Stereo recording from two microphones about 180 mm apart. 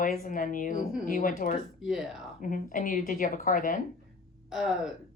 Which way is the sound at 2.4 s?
50° left (ahead or behind).